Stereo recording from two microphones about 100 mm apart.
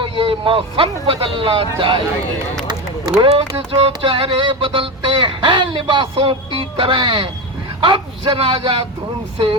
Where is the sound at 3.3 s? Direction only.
70° right (ahead or behind).